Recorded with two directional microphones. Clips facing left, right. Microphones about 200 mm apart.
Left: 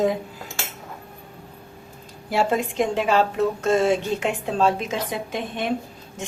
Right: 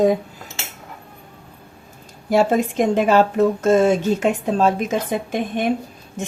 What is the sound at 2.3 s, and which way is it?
A woman's voice, 45° right (ahead or behind).